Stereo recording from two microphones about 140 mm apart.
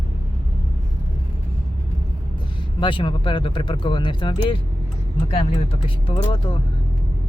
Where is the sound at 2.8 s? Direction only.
35° left (ahead or behind).